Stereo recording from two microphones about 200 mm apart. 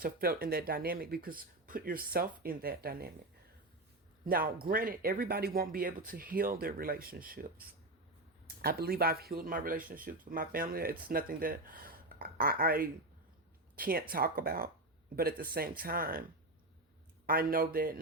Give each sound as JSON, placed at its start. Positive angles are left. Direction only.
{"t": 0.0, "sound": "speech", "side_deg": -50}
{"t": 4.3, "sound": "speech", "side_deg": -45}
{"t": 17.2, "sound": "speech", "side_deg": -45}